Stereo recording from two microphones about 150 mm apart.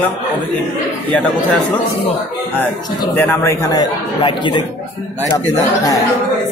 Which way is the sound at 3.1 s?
10° left (ahead or behind).